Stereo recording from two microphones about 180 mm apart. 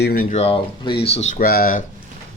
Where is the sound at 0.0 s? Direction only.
55° left (ahead or behind).